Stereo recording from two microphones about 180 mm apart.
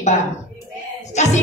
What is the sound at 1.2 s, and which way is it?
Speech, 40° left (ahead or behind).